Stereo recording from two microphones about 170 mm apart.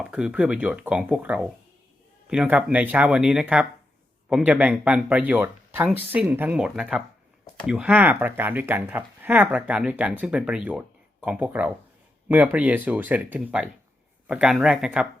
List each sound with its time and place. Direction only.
0.0 s speech: 5° right (ahead or behind)